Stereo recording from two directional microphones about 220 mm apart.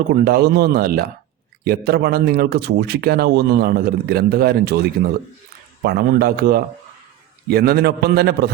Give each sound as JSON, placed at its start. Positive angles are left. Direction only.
{"t": 0.1, "sound": "a man's voice", "side_deg": -45}
{"t": 5.8, "sound": "a man's voice", "side_deg": -45}